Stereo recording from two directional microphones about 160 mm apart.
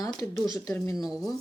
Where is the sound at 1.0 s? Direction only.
Centre (ahead or behind).